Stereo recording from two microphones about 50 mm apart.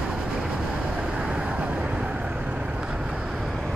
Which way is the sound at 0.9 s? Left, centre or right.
Centre.